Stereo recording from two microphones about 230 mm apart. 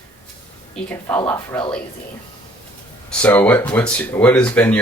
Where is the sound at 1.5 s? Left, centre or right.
Centre.